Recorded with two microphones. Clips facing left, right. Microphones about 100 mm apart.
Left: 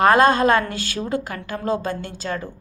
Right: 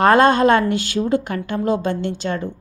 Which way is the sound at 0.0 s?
30° right (ahead or behind).